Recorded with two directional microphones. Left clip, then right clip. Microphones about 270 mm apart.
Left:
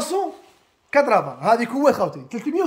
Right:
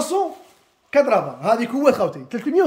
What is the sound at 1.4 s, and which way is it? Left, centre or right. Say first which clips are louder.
Speech: left 1 dB; centre.